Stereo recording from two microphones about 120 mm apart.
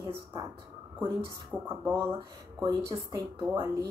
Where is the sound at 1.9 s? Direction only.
20° right (ahead or behind).